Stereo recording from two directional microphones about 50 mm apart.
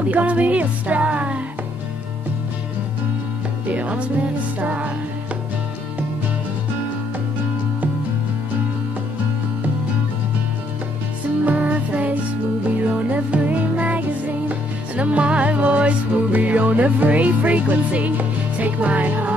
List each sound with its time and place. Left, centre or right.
0.1 s music: right
3.6 s music: right
11.4 s music: right